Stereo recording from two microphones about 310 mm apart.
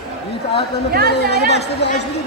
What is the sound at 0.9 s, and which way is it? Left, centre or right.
Speech, right.